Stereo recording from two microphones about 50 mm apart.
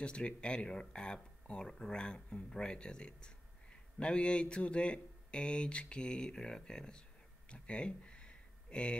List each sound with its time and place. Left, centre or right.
0.0 s speech: centre